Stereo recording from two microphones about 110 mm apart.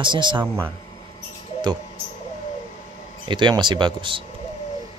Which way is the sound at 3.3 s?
45° right (ahead or behind).